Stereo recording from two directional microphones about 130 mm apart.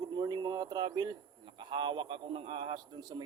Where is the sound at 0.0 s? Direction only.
30° right (ahead or behind).